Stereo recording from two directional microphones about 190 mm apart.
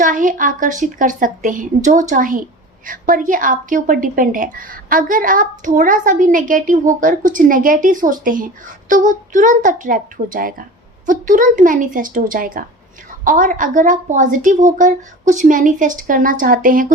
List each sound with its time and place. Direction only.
0.0 s speech: 45° right (ahead or behind)